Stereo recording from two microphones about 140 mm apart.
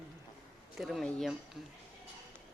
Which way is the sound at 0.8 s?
Centre (ahead or behind).